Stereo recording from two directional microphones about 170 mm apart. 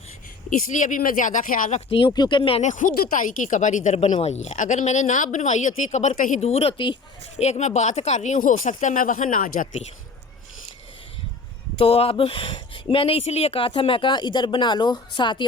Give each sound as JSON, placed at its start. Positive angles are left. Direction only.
{"t": 0.5, "sound": "a woman's voice", "side_deg": 50}
{"t": 1.9, "sound": "speech", "side_deg": 30}
{"t": 2.6, "sound": "a woman's voice", "side_deg": 45}
{"t": 11.8, "sound": "speech", "side_deg": 35}